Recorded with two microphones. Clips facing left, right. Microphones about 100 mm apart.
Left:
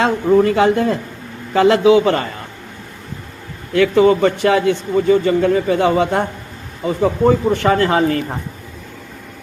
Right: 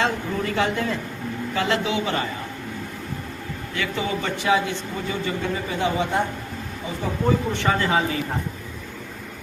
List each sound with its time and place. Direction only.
0.0 s speech: 50° left (ahead or behind)
3.8 s speech: 55° left (ahead or behind); by 7.3 s 75° left (ahead or behind)
7.5 s speech: 55° left (ahead or behind)